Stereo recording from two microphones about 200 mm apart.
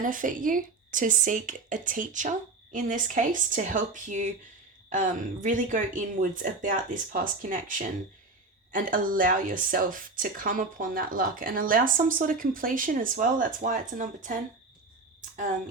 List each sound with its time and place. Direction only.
0.0 s speech: 40° right (ahead or behind)